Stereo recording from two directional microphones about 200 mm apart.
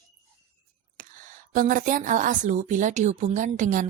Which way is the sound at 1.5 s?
45° right (ahead or behind).